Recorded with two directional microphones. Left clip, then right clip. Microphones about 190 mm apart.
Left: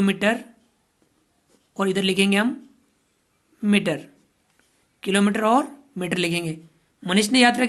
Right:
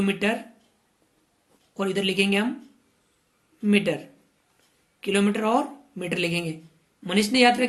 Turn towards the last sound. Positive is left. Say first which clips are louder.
# left 1 dB
turn(degrees=45)  # may be behind; listen again after turning